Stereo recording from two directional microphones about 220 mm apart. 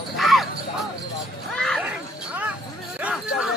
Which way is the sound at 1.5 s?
Centre (ahead or behind).